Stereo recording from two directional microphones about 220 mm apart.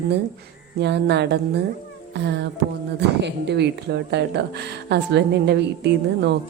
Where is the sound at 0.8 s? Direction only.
50° right (ahead or behind).